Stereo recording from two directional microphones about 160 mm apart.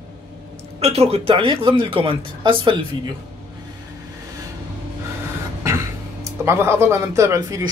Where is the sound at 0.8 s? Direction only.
40° right (ahead or behind).